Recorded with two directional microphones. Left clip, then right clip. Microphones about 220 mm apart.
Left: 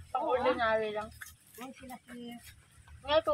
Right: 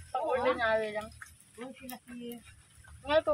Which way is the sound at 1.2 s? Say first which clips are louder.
Right 1 dB; 55° left (ahead or behind).